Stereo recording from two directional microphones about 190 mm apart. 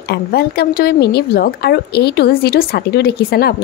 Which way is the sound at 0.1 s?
55° left (ahead or behind).